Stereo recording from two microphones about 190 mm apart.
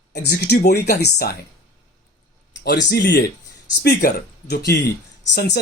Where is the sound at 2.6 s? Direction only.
65° left (ahead or behind).